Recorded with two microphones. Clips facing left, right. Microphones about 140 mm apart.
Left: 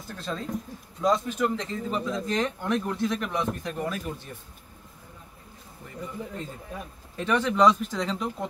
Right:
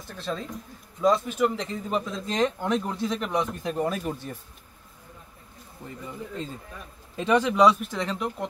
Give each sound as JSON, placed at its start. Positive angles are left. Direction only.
{"t": 0.2, "sound": "speech", "side_deg": 0}
{"t": 1.9, "sound": "speech", "side_deg": -20}
{"t": 3.7, "sound": "speech", "side_deg": -35}
{"t": 7.2, "sound": "speech", "side_deg": -15}